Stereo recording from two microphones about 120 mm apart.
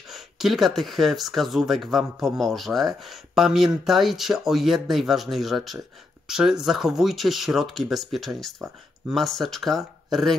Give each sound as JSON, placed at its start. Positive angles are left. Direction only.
{"t": 0.1, "sound": "speech", "side_deg": 0}